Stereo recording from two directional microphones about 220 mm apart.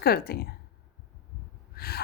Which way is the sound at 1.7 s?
45° left (ahead or behind).